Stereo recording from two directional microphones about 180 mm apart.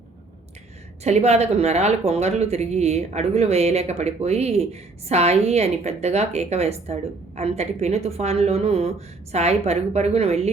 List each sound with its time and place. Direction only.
1.0 s speech: 35° right (ahead or behind)